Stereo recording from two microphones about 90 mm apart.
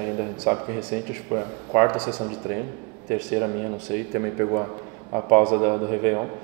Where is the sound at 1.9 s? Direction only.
10° right (ahead or behind).